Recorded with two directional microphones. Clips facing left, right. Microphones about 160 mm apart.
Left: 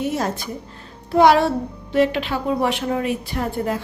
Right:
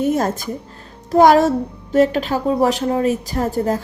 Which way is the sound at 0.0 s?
50° right (ahead or behind).